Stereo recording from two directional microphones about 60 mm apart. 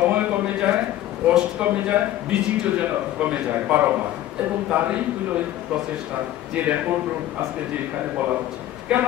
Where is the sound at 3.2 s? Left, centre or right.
Right.